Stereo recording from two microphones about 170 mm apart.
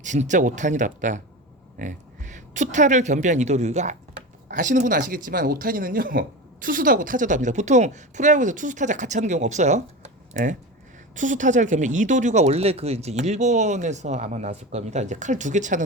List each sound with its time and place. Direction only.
0.0 s a woman's voice: 45° right (ahead or behind)